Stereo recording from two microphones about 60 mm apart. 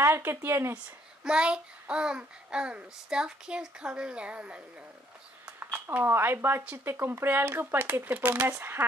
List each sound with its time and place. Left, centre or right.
0.0 s speech: right
1.2 s a child's voice: centre
5.6 s speech: right
8.5 s speech: right